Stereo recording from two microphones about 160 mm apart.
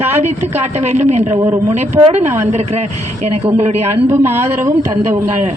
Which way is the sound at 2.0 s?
15° right (ahead or behind).